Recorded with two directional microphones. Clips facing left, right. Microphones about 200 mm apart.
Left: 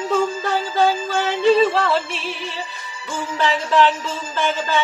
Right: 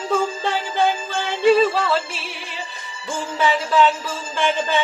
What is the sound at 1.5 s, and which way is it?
Music, centre (ahead or behind).